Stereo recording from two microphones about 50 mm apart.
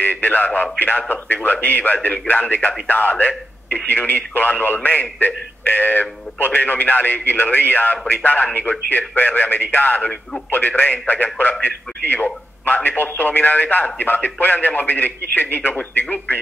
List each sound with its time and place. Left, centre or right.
0.0 s speech: left